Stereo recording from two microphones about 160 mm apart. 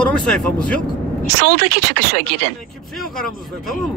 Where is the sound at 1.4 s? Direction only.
90° right.